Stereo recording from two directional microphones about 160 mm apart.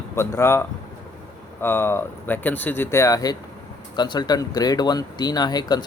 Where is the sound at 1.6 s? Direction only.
15° left (ahead or behind).